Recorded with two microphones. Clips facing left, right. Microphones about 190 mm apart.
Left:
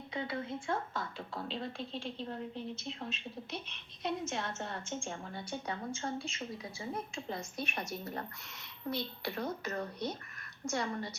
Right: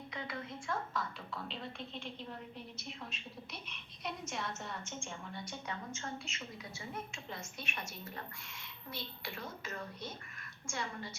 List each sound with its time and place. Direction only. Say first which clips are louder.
0.1 s a woman's voice: left 7 dB; 30° left (ahead or behind)